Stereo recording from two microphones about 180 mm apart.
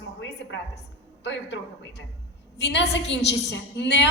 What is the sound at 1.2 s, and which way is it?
A woman's voice, 75° left (ahead or behind).